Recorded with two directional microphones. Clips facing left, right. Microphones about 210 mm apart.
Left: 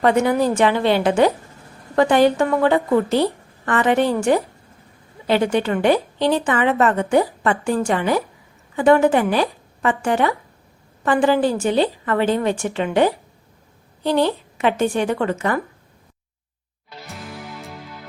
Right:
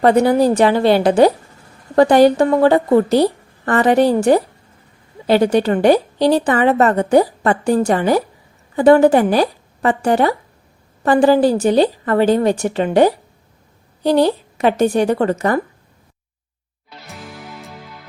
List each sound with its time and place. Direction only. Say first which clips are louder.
0.0 s a woman's voice: right 4 dB; 35° right (ahead or behind)
17.1 s music: even; centre (ahead or behind)